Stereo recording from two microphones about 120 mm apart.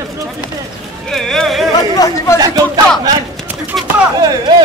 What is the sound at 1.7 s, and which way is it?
Chatter, 30° left (ahead or behind).